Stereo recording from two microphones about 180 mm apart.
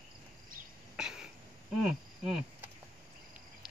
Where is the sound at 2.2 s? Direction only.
5° right (ahead or behind).